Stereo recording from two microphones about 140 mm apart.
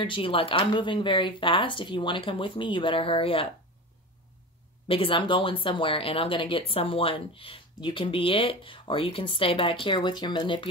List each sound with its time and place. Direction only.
0.0 s speech: 40° left (ahead or behind)
4.8 s speech: 40° left (ahead or behind)